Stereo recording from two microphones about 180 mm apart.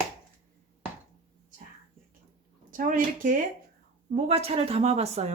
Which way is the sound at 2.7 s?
50° right (ahead or behind).